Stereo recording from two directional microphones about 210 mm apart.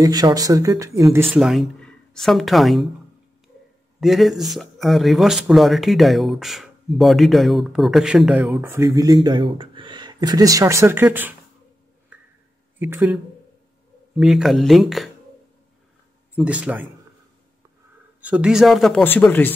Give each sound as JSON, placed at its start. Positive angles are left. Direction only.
{"t": 0.0, "sound": "speech", "side_deg": -20}
{"t": 1.2, "sound": "speech", "side_deg": 0}
{"t": 4.0, "sound": "speech", "side_deg": 0}
{"t": 12.7, "sound": "speech", "side_deg": -10}
{"t": 16.3, "sound": "speech", "side_deg": -5}
{"t": 18.2, "sound": "speech", "side_deg": -5}